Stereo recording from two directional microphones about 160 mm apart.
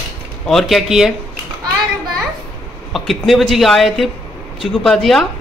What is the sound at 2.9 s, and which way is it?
Speech, centre (ahead or behind).